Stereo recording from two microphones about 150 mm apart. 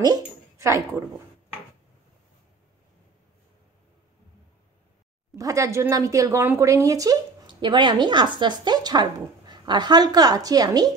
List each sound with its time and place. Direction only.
0.0 s a woman's voice: 20° right (ahead or behind)
5.3 s speech: 20° right (ahead or behind)